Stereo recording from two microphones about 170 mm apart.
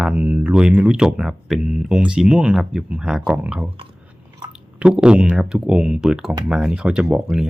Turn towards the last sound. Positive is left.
turn(degrees=-15)  # may be behind; listen again after turning